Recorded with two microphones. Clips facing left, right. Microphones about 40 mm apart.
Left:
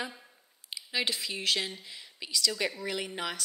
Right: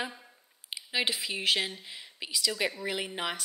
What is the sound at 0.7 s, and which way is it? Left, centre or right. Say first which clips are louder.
Speech: right 1 dB; centre.